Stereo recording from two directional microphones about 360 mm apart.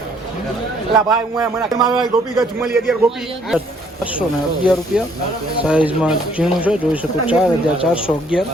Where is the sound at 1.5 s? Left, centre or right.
Centre.